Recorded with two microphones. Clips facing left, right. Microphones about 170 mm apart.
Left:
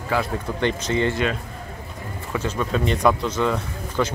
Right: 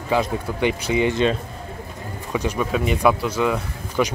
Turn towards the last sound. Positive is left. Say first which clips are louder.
# right 2 dB
turn(degrees=-10)  # may be behind; listen again after turning